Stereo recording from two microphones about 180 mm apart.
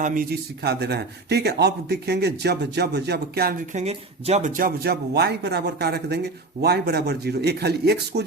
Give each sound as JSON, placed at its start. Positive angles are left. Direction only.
{"t": 0.0, "sound": "speech", "side_deg": -50}
{"t": 3.7, "sound": "speech", "side_deg": -40}